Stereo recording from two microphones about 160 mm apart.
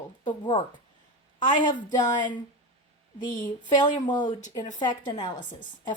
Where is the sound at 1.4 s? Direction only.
30° left (ahead or behind).